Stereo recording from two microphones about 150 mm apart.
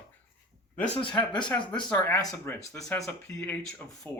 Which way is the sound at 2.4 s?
15° left (ahead or behind).